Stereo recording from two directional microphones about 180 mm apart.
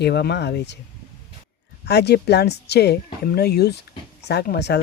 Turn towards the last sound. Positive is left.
turn(degrees=65)  # may be behind; listen again after turning